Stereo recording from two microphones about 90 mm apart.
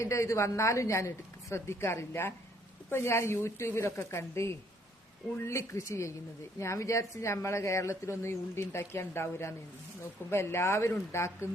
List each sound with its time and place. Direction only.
0.0 s a woman's voice: 35° left (ahead or behind)